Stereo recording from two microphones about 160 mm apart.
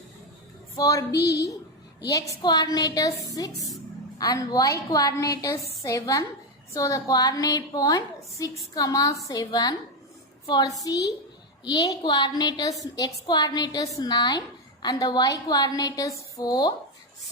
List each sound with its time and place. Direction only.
0.8 s a woman's voice: 20° left (ahead or behind)
1.1 s a woman's voice: 90° left
2.3 s a woman's voice: 25° left (ahead or behind)
11.7 s a woman's voice: 25° left (ahead or behind)